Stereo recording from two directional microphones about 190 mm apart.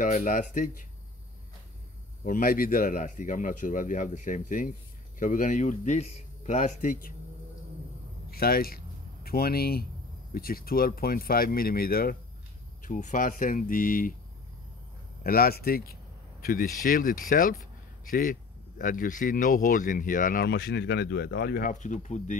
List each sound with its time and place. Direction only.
0.0 s speech: 45° left (ahead or behind)
2.2 s speech: 45° left (ahead or behind)
8.3 s speech: 50° left (ahead or behind)
15.2 s speech: 50° left (ahead or behind)